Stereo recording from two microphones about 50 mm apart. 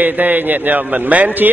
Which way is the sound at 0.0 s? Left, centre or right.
Right.